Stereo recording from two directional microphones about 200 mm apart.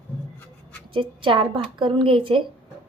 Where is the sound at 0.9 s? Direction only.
25° right (ahead or behind).